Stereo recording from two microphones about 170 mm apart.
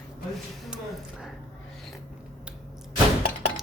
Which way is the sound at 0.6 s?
Centre (ahead or behind).